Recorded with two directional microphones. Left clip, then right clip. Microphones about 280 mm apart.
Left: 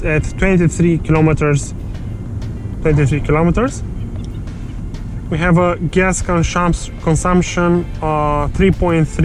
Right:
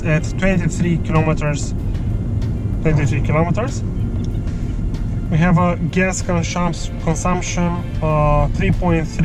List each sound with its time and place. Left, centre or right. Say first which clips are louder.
0.0 s speech: left 3 dB; left
2.8 s speech: left 5 dB; left
5.3 s speech: left 4 dB; left